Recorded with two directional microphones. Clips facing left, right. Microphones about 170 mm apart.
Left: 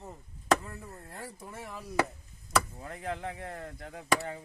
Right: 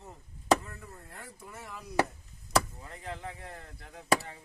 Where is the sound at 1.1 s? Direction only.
30° left (ahead or behind).